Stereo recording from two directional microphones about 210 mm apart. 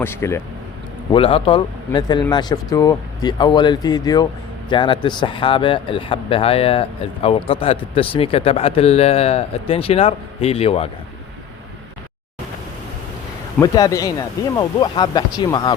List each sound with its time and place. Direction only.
0.0 s speech: 10° left (ahead or behind)
1.1 s speech: 25° left (ahead or behind)
13.6 s speech: 15° left (ahead or behind)